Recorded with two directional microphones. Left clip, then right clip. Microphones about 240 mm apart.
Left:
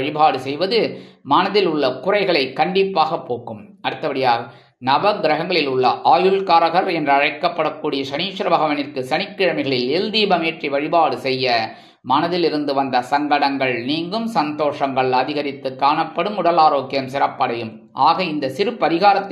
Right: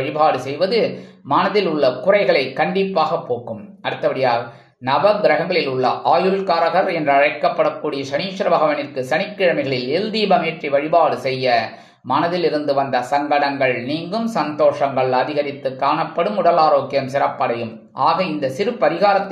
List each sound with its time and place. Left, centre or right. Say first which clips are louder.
0.0 s a man's voice: even; left